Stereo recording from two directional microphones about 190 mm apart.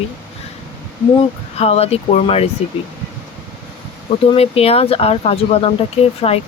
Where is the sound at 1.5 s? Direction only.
35° left (ahead or behind).